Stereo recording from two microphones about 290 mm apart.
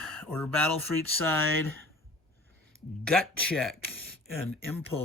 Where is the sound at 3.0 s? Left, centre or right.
Centre.